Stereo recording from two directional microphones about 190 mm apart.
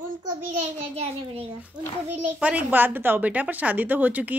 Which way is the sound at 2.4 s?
10° right (ahead or behind).